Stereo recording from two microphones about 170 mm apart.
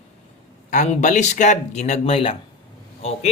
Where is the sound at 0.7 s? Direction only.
45° left (ahead or behind).